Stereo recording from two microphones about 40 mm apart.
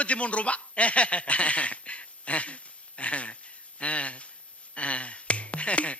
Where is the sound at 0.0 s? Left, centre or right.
Left.